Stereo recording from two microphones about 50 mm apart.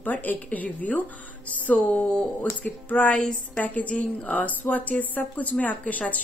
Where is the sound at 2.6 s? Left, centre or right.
Left.